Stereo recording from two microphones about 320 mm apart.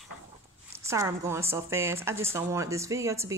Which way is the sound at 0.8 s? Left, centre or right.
Centre.